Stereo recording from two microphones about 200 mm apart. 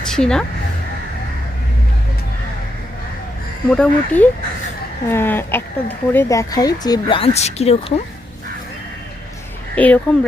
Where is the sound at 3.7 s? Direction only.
5° left (ahead or behind); by 7.8 s 30° left (ahead or behind).